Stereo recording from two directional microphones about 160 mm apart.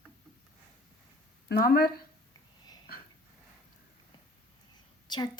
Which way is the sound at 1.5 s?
65° left (ahead or behind).